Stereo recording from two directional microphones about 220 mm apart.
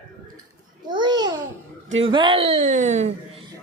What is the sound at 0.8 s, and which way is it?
Babbling, 20° right (ahead or behind).